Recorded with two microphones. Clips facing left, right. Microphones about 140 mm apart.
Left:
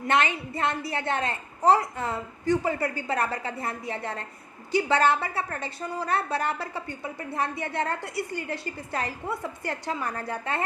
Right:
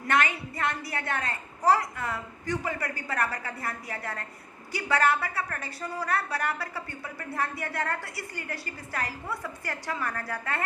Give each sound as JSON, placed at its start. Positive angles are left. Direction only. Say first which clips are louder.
{"t": 0.1, "sound": "a woman's voice", "louder": "left 2 dB", "side_deg": 25}